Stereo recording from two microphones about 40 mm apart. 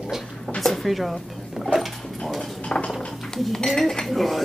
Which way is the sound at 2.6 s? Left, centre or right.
Left.